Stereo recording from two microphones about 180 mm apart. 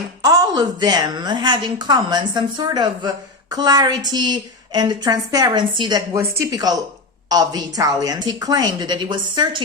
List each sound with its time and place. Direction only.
0.2 s a woman's voice: 20° right (ahead or behind)